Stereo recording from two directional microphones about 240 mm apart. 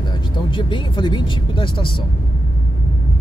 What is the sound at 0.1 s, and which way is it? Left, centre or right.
Speech, centre.